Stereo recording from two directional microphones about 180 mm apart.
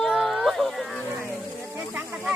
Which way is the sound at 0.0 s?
Centre (ahead or behind).